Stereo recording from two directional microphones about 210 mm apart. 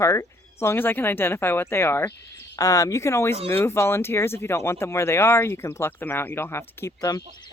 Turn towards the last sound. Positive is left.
turn(degrees=15)  # may be behind; listen again after turning